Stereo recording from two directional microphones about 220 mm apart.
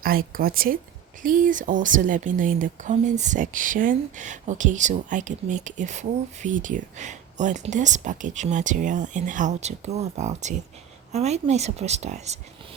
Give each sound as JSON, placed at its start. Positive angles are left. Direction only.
{"t": 0.0, "sound": "a woman's voice", "side_deg": -40}